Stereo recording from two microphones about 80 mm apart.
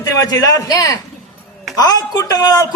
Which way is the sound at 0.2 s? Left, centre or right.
Left.